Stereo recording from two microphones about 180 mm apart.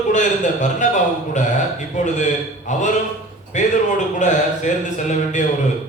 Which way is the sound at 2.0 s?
40° left (ahead or behind).